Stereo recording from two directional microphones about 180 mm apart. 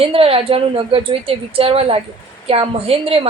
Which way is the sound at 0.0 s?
30° right (ahead or behind).